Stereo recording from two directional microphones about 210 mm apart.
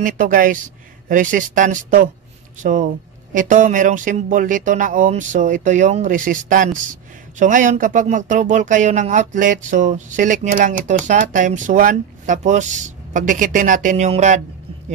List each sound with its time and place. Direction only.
0.0 s speech: 40° right (ahead or behind)